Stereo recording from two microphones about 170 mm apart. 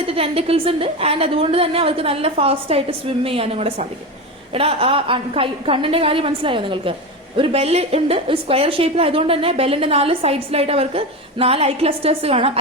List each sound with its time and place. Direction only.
0.0 s a woman's voice: 35° right (ahead or behind)